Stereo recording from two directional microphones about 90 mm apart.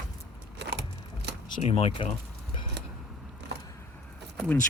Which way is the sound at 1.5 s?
80° left.